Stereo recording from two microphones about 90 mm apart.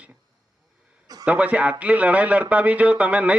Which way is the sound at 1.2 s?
15° right (ahead or behind).